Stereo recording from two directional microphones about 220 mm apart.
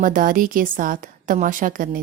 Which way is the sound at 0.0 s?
40° right (ahead or behind).